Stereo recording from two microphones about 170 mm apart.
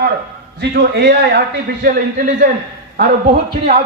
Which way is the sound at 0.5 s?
65° right (ahead or behind).